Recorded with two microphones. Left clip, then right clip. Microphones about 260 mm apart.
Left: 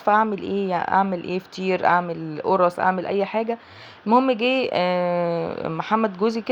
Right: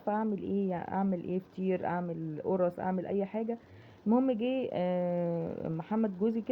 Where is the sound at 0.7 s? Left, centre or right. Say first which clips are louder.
Left 14 dB; centre.